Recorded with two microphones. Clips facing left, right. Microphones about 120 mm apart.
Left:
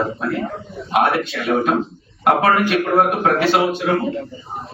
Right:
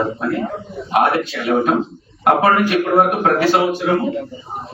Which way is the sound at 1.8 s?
20° right (ahead or behind).